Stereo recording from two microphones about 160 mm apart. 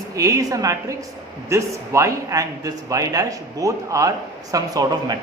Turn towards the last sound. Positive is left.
turn(degrees=-20)  # may be behind; listen again after turning